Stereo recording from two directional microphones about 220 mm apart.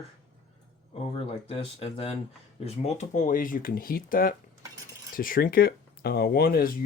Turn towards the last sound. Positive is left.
turn(degrees=45)  # may be behind; listen again after turning